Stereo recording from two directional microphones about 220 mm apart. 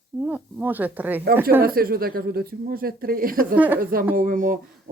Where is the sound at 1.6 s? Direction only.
40° right (ahead or behind).